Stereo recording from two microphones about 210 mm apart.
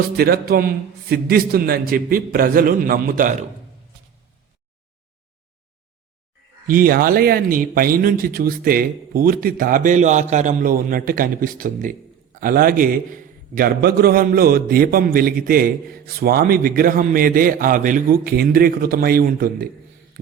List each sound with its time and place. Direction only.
0.2 s speech: 45° right (ahead or behind)
6.7 s speech: 45° right (ahead or behind)